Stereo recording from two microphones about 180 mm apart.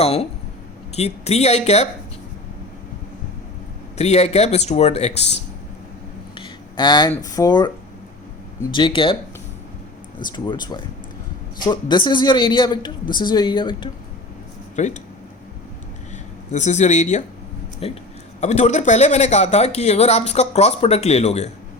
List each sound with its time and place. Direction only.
0.0 s speech: 35° left (ahead or behind)
3.9 s speech: 40° left (ahead or behind)
6.3 s a sound: 25° left (ahead or behind)
7.1 s a man's voice: 20° left (ahead or behind)
8.7 s a man's voice: 25° left (ahead or behind)
10.3 s a man's voice: 25° left (ahead or behind)
14.8 s speech: 40° left (ahead or behind)
16.5 s speech: 40° left (ahead or behind)